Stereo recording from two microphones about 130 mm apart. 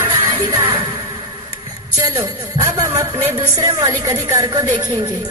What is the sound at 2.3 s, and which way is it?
Speech, 20° right (ahead or behind).